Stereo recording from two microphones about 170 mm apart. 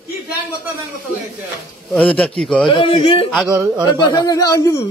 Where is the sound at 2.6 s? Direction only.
30° left (ahead or behind).